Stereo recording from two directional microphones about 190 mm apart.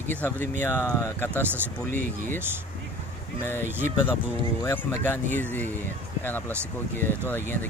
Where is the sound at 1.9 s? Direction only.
45° right (ahead or behind).